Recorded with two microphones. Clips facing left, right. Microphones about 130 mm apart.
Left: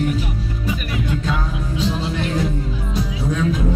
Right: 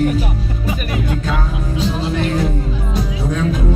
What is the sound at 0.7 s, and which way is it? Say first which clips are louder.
Music: right 2 dB; 55° right (ahead or behind).